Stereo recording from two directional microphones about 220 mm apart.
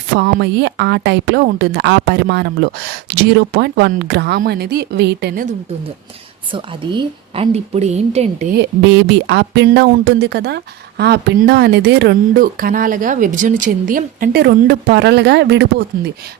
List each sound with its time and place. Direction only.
0.2 s speech: 50° right (ahead or behind)
6.5 s a woman's voice: 20° right (ahead or behind)
8.5 s speech: 50° right (ahead or behind)